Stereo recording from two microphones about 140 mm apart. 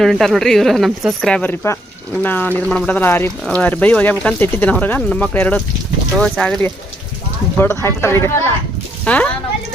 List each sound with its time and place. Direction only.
0.0 s speech: 5° left (ahead or behind)
1.4 s speech: 15° left (ahead or behind)
7.6 s speech: 15° left (ahead or behind)